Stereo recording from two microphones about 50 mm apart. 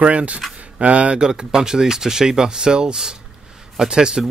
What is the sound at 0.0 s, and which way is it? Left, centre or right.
Speech, right.